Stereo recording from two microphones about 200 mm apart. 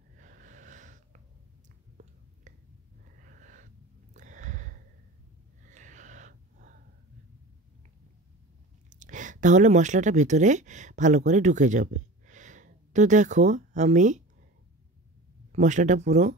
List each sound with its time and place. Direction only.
0.2 s snort: 40° right (ahead or behind)
2.0 s whispering: 35° right (ahead or behind)
3.2 s wheeze: 40° right (ahead or behind)
4.1 s a sound: 40° right (ahead or behind)
8.9 s speech: 40° right (ahead or behind)
15.5 s speech: 40° right (ahead or behind)